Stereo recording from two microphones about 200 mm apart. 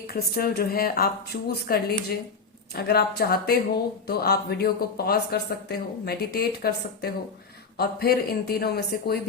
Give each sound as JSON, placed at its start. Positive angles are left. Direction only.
{"t": 0.1, "sound": "speech", "side_deg": 50}